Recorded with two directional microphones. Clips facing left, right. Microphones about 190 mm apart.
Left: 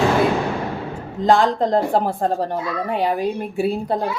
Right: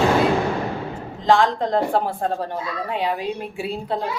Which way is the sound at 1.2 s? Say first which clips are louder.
Left 2 dB; 40° left (ahead or behind).